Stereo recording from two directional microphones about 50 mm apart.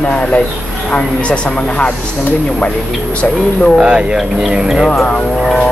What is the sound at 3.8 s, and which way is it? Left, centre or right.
Speech, centre.